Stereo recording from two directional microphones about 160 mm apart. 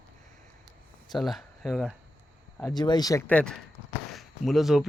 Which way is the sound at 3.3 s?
5° left (ahead or behind).